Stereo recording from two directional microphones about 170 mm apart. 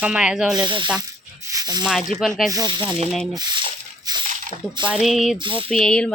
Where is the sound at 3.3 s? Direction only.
25° right (ahead or behind).